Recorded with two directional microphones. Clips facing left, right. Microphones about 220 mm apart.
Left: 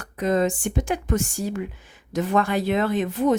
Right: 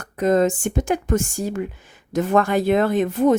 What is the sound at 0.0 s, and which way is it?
Speech, 45° right (ahead or behind).